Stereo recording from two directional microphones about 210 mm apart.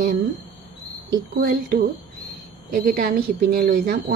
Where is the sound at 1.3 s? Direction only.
45° right (ahead or behind).